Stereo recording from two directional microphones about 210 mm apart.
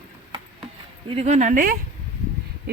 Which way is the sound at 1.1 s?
30° right (ahead or behind).